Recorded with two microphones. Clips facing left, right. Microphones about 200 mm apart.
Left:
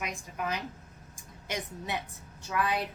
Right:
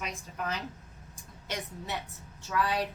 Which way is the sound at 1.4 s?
15° left (ahead or behind).